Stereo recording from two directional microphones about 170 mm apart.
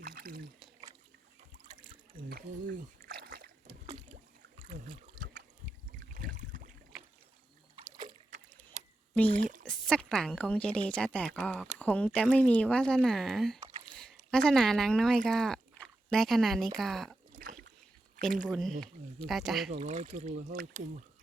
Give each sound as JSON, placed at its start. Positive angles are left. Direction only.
{"t": 0.0, "sound": "a sound", "side_deg": -60}
{"t": 2.3, "sound": "a sound", "side_deg": -55}
{"t": 5.2, "sound": "trickle", "side_deg": -50}
{"t": 6.1, "sound": "boat", "side_deg": -50}
{"t": 8.8, "sound": "a sound", "side_deg": -45}
{"t": 9.6, "sound": "a woman's voice", "side_deg": 5}
{"t": 17.3, "sound": "rowboat", "side_deg": -55}
{"t": 18.4, "sound": "speech", "side_deg": 0}
{"t": 19.8, "sound": "speech", "side_deg": -45}